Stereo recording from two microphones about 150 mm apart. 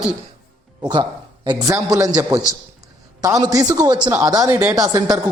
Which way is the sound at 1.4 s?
20° right (ahead or behind).